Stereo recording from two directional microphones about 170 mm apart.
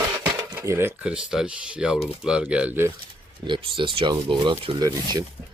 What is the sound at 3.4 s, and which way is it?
Speech, 30° right (ahead or behind).